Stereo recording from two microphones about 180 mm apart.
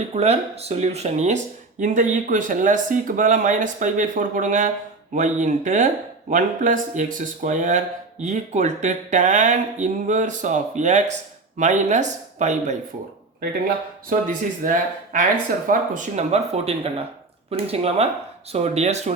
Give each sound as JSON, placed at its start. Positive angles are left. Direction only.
{"t": 0.1, "sound": "speech", "side_deg": -35}
{"t": 14.1, "sound": "speech", "side_deg": -50}